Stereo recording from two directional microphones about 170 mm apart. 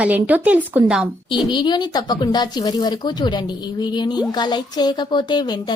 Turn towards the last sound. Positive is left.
turn(degrees=25)  # may be behind; listen again after turning